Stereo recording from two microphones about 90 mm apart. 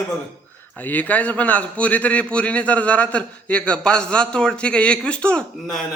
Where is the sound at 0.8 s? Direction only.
15° left (ahead or behind).